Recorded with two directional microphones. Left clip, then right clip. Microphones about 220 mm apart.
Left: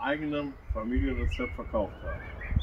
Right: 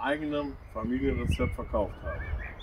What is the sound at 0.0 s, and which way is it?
Speech, centre (ahead or behind).